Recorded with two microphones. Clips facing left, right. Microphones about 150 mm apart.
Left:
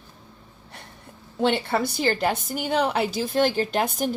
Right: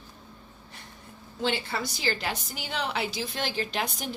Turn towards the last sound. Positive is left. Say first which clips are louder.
# left 8 dB
turn(degrees=45)  # may be behind; listen again after turning